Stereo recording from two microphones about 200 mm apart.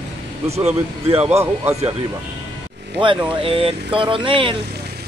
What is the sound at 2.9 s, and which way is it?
Speech, 25° right (ahead or behind).